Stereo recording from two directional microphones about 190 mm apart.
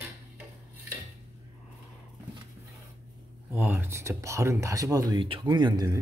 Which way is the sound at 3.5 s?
10° right (ahead or behind).